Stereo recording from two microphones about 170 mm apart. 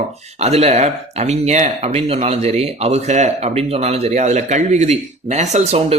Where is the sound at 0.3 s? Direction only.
40° right (ahead or behind).